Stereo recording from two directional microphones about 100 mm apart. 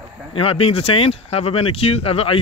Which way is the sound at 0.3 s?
70° left (ahead or behind).